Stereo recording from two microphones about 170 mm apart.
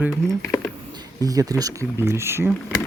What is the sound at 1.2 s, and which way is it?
Speech, 20° right (ahead or behind).